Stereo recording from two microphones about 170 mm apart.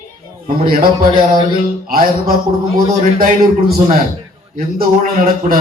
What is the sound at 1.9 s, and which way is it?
A man's voice, 60° right (ahead or behind).